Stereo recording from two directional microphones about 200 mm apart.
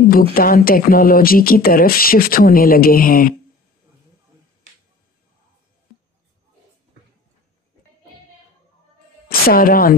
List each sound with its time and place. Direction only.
0.1 s speech: 45° left (ahead or behind)
9.5 s speech: 45° left (ahead or behind)